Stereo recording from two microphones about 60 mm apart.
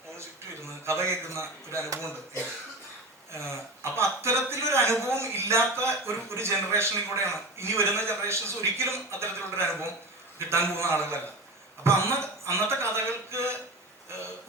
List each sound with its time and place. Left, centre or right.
0.2 s a man's voice: right
3.3 s speech: right